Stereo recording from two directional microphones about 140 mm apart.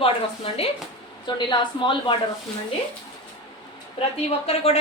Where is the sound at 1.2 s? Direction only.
35° left (ahead or behind).